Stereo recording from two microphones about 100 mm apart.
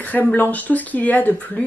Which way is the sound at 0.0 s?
15° left (ahead or behind).